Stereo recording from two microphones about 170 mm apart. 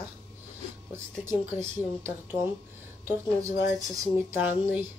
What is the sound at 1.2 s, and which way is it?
Speech, 15° right (ahead or behind).